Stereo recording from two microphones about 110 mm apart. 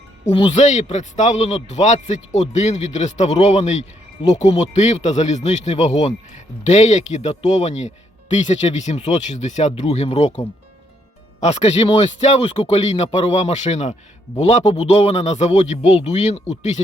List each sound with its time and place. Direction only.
0.5 s speech: 90° left
11.4 s speech: 90° left